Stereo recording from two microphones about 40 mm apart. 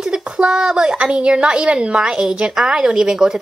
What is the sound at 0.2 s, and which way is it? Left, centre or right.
A woman's voice, right.